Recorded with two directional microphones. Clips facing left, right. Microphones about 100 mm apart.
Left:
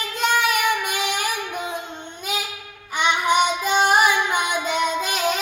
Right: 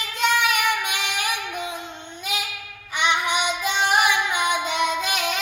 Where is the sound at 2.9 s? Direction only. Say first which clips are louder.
Left 3 dB; 40° left (ahead or behind).